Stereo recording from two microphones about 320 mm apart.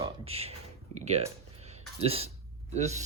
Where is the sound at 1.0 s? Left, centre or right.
Centre.